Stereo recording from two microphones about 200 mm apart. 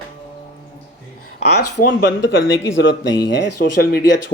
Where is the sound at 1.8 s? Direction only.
60° left (ahead or behind).